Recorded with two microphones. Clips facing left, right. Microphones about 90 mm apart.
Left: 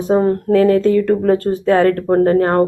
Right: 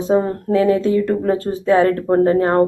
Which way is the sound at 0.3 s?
20° right (ahead or behind).